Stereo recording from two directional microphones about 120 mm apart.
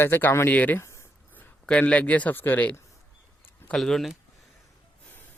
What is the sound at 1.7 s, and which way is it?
Speech, 10° left (ahead or behind).